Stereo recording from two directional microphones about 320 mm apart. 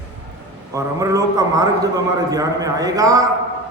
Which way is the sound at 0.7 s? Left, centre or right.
Centre.